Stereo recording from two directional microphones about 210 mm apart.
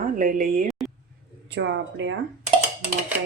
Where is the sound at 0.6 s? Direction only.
Centre (ahead or behind).